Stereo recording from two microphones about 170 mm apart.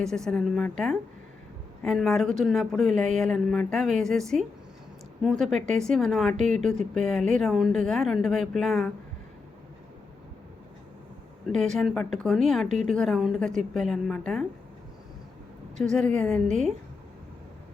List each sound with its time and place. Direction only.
0.3 s speech: centre (ahead or behind)
6.3 s speech: 45° right (ahead or behind)
6.6 s speech: 5° left (ahead or behind)
11.5 s speech: 5° left (ahead or behind)
12.6 s speech: 45° right (ahead or behind)
12.9 s speech: 5° left (ahead or behind)
15.8 s speech: 5° left (ahead or behind)